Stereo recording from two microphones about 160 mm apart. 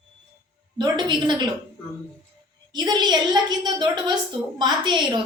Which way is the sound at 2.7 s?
25° right (ahead or behind).